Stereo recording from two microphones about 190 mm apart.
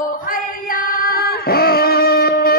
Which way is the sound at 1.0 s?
50° left (ahead or behind).